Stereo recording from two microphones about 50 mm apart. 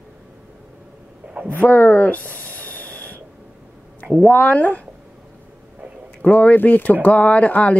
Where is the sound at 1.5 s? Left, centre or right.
Left.